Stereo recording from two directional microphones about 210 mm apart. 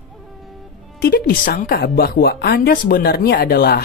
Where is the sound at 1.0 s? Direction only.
45° left (ahead or behind).